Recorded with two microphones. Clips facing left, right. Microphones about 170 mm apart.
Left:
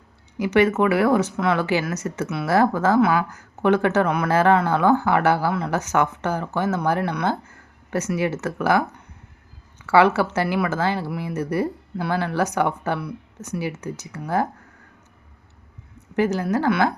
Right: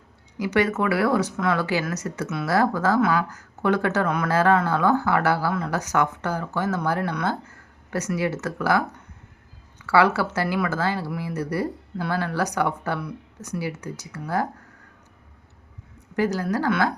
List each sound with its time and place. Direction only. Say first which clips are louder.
0.3 s speech: left 4 dB; 25° left (ahead or behind)
9.8 s speech: left 3 dB; 25° left (ahead or behind)
16.1 s speech: left 2 dB; 25° left (ahead or behind)